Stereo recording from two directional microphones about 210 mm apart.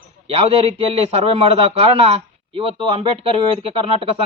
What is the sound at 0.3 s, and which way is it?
Speech, 25° right (ahead or behind).